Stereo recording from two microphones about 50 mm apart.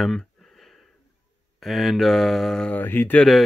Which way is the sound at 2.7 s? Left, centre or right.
Left.